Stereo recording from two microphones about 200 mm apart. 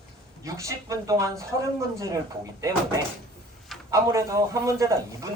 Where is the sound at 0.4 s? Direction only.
15° right (ahead or behind).